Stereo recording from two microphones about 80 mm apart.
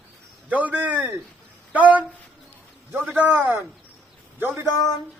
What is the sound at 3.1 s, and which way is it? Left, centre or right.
Speech, right.